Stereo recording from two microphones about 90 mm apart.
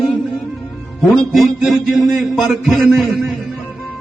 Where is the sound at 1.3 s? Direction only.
Centre (ahead or behind).